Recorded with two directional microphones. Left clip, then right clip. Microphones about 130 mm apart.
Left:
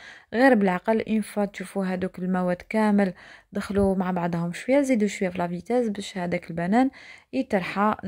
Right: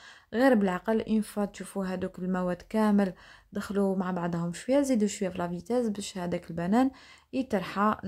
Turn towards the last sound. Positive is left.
turn(degrees=30)  # may be behind; listen again after turning